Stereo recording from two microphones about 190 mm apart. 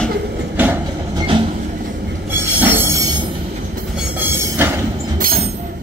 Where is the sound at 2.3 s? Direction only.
10° right (ahead or behind).